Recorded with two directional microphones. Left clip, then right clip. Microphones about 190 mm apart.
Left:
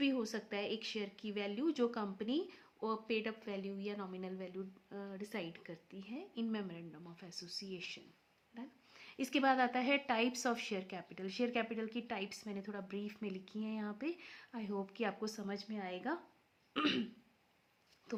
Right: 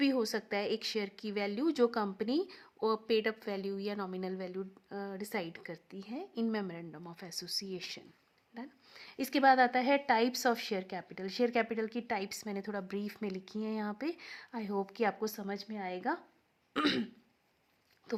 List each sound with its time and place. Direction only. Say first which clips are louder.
0.0 s speech: right 6 dB; 55° right (ahead or behind)
18.1 s speech: right 7 dB; 40° right (ahead or behind)